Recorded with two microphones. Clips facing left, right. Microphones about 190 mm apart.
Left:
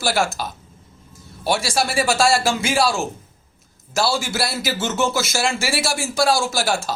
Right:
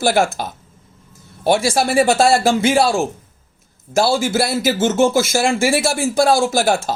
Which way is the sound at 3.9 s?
50° right (ahead or behind).